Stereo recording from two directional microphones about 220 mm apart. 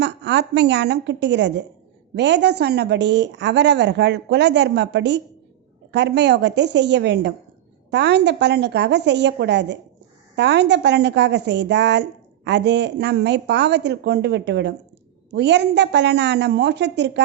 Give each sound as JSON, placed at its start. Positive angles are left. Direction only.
{"t": 0.0, "sound": "a woman's voice", "side_deg": -50}